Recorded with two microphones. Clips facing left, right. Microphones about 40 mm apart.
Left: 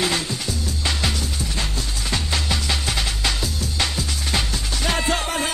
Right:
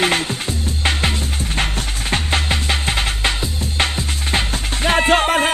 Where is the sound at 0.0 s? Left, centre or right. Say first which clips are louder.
Right 5 dB; right.